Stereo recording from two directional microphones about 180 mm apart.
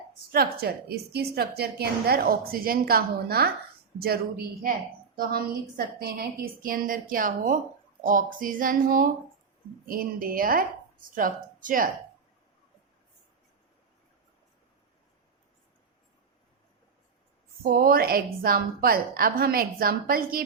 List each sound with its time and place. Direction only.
0.3 s a woman's voice: 60° right (ahead or behind)
17.6 s a woman's voice: 50° right (ahead or behind)